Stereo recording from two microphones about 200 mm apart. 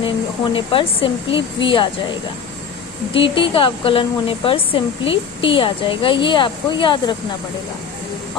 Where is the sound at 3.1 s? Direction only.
25° left (ahead or behind).